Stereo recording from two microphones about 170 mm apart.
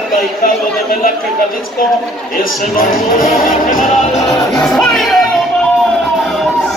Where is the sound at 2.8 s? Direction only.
55° left (ahead or behind).